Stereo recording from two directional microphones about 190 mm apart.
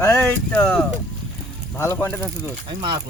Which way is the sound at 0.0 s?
10° left (ahead or behind).